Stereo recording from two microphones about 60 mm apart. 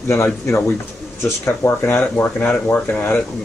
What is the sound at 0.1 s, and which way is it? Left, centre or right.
Speech, left.